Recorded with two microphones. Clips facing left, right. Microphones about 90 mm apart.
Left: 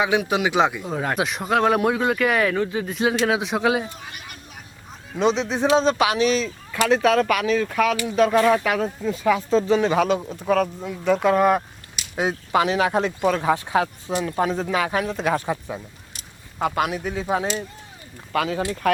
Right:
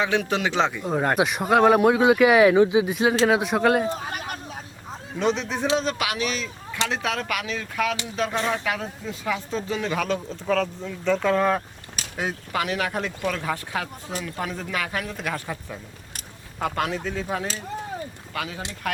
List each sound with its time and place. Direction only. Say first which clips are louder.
0.0 s speech: left 3 dB; 10° left (ahead or behind)
0.9 s speech: right 2 dB; centre (ahead or behind)
3.8 s a sound: right 9 dB; 40° right (ahead or behind)
5.2 s speech: left 4 dB; 20° left (ahead or behind)
6.8 s speech: left 9 dB; 45° left (ahead or behind)
7.7 s speech: left 5 dB; 65° left (ahead or behind)
9.6 s speech: left 6 dB; 30° left (ahead or behind)
10.1 s speech: left 4 dB; 15° left (ahead or behind)
12.5 s speech: left 7 dB; 25° left (ahead or behind)
16.6 s speech: left 3 dB; 5° left (ahead or behind)
17.0 s speech: left 4 dB; 15° left (ahead or behind)
18.3 s speech: left 9 dB; 75° left (ahead or behind)